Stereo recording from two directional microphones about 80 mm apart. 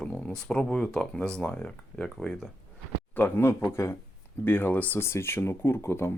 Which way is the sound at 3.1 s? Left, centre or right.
Left.